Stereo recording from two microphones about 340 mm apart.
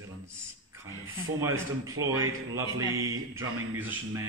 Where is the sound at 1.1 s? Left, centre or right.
Centre.